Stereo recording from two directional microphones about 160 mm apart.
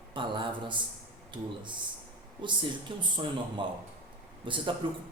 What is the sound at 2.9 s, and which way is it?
Speech, 30° right (ahead or behind).